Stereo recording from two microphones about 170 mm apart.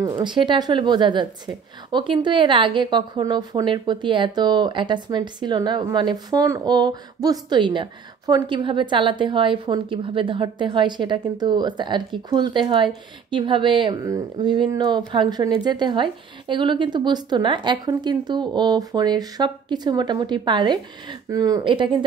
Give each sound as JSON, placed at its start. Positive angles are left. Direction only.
{"t": 0.0, "sound": "a woman's voice", "side_deg": -25}